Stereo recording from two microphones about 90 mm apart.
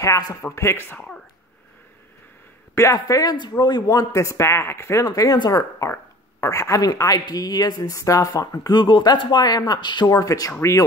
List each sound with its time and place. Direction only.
0.0 s speech: 40° left (ahead or behind)
0.9 s speech: 10° left (ahead or behind)
2.7 s a man's voice: 35° left (ahead or behind)
4.1 s speech: 35° left (ahead or behind)
8.7 s speech: 60° left (ahead or behind)
10.1 s speech: 40° left (ahead or behind)